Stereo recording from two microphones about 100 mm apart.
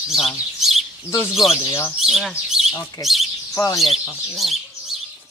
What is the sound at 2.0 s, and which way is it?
Speech, centre (ahead or behind).